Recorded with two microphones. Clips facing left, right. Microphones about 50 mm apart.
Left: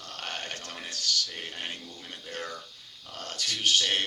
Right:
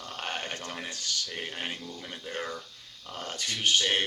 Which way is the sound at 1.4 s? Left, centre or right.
Centre.